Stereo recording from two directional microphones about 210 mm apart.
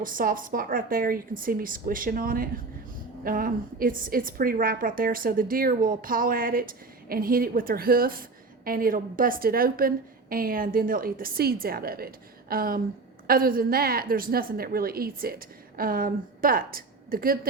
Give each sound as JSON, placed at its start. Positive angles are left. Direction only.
{"t": 0.0, "sound": "a woman's voice", "side_deg": -40}